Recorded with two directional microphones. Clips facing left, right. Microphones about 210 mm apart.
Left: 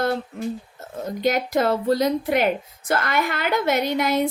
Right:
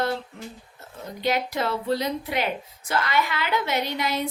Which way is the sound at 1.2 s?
45° left (ahead or behind).